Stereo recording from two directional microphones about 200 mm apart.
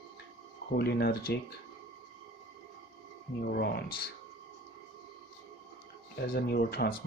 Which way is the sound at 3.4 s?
50° left (ahead or behind).